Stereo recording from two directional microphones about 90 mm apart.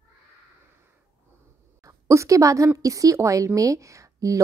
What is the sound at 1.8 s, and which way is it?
A woman's voice, 35° right (ahead or behind).